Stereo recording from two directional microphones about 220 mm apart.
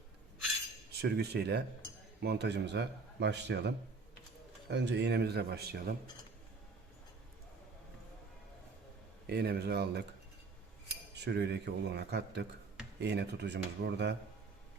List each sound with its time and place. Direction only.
1.0 s speech: 45° right (ahead or behind)
4.7 s speech: 50° right (ahead or behind)
9.3 s speech: 45° right (ahead or behind)
11.1 s speech: 50° right (ahead or behind)